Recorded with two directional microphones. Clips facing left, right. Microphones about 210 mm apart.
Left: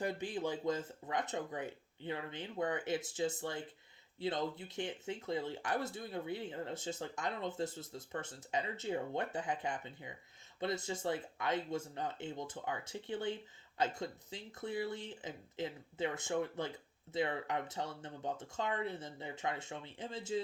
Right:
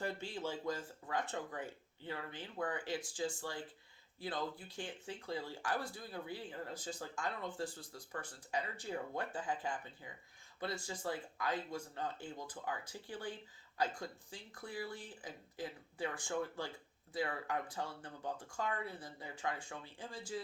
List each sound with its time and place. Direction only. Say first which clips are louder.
0.0 s speech: left 4 dB; 15° left (ahead or behind)